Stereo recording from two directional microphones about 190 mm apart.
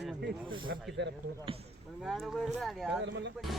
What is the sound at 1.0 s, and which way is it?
Speech, 65° right (ahead or behind).